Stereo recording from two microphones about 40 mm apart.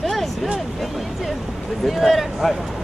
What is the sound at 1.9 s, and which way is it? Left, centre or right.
Speech, centre.